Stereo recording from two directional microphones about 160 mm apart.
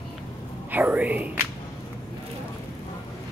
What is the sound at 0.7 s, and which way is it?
Whispering, 10° right (ahead or behind).